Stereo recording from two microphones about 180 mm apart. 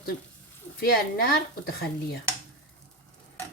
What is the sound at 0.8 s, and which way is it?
Speech, 55° left (ahead or behind).